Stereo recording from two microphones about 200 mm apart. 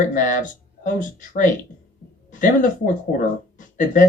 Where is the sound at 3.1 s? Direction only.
40° left (ahead or behind).